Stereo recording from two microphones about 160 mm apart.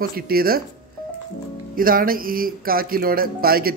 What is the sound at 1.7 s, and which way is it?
Speech, 65° right (ahead or behind).